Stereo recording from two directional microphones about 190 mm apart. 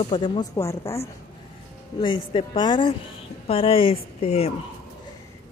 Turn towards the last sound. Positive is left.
turn(degrees=30)  # may be behind; listen again after turning